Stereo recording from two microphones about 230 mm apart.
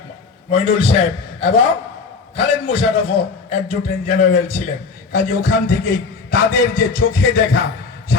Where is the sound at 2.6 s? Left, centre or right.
Left.